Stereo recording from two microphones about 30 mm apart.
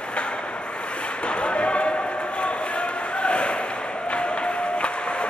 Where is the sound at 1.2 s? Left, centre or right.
Left.